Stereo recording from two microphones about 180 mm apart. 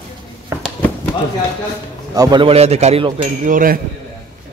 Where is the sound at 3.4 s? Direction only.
50° right (ahead or behind).